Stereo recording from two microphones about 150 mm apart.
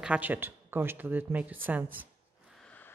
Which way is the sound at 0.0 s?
10° right (ahead or behind).